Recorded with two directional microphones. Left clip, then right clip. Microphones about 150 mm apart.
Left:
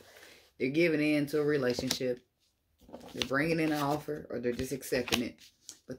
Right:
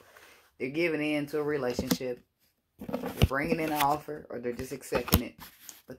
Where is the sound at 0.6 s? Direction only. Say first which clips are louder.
Left 1 dB; 25° left (ahead or behind).